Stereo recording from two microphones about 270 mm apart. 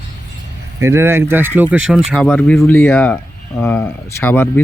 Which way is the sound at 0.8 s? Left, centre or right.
Centre.